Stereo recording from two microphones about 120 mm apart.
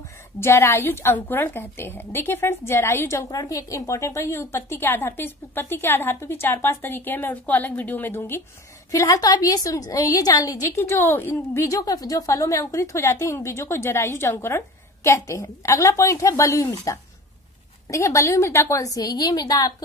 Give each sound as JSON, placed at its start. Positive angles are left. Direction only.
{"t": 0.4, "sound": "a woman's voice", "side_deg": 20}